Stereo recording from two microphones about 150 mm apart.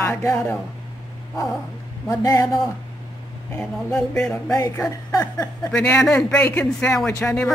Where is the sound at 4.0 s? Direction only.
5° left (ahead or behind).